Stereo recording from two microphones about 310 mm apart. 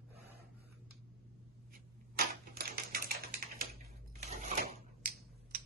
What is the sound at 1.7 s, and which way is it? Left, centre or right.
Typewriter, right.